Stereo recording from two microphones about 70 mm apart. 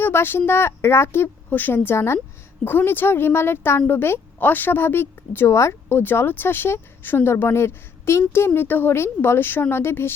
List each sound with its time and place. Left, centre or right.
0.0 s speech: left
5.5 s speech: left
6.0 s speech: left